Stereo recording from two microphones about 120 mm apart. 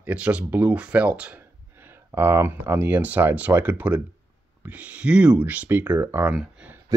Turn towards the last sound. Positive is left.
turn(degrees=-30)  # may be behind; listen again after turning